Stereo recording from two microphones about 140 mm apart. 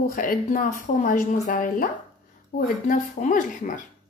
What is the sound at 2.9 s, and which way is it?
Speech, 70° left (ahead or behind).